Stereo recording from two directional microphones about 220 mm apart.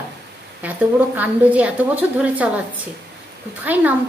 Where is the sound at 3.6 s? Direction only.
5° right (ahead or behind).